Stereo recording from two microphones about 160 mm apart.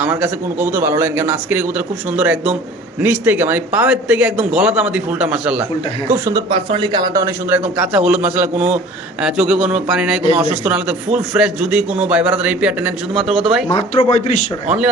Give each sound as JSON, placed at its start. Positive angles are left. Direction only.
{"t": 0.0, "sound": "speech", "side_deg": -10}
{"t": 6.5, "sound": "a man's voice", "side_deg": -35}
{"t": 7.8, "sound": "a man's voice", "side_deg": -5}
{"t": 14.0, "sound": "speech", "side_deg": 40}